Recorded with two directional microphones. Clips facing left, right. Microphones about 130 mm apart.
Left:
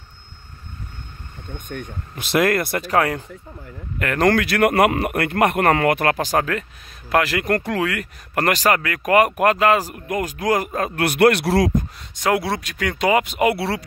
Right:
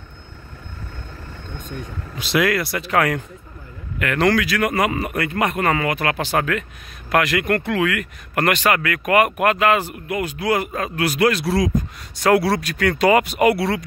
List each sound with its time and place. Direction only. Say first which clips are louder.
1.7 s speech: left 1 dB; 55° left (ahead or behind)
2.9 s speech: right 1 dB; 30° left (ahead or behind)
4.0 s speech: even; 40° left (ahead or behind)
6.1 s speech: even; 35° left (ahead or behind); by 11.7 s 65° left (ahead or behind)
12.2 s speech: right 4 dB; 20° left (ahead or behind)